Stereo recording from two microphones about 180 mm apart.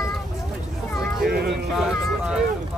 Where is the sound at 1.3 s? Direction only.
60° right (ahead or behind).